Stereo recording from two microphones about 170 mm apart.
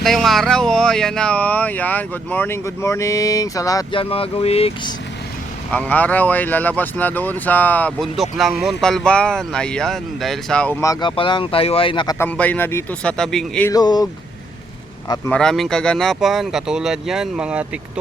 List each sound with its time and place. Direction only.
0.0 s speech: centre (ahead or behind); by 4.0 s 20° left (ahead or behind)
4.0 s speech: 35° left (ahead or behind)
5.7 s speech: 10° left (ahead or behind)
10.8 s speech: 20° left (ahead or behind)
11.1 s speech: 30° left (ahead or behind)
12.2 s speech: 10° left (ahead or behind)
13.7 s speech: 20° left (ahead or behind)
15.3 s speech: 5° left (ahead or behind)